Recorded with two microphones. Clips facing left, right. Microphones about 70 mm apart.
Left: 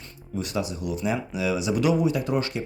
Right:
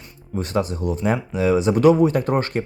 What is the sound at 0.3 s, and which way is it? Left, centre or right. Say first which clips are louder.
Speech: right 6 dB; right.